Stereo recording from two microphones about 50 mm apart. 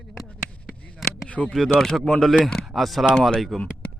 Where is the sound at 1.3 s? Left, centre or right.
Left.